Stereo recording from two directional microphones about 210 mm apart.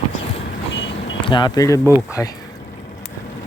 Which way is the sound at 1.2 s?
20° left (ahead or behind).